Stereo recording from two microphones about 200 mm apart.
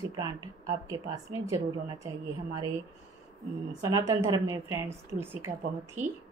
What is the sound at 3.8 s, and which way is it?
Speech, 15° right (ahead or behind).